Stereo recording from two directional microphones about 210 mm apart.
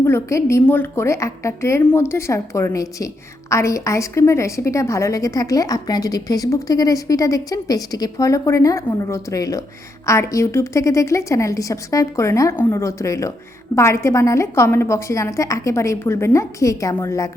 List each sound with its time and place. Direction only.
0.0 s a woman's voice: 15° left (ahead or behind)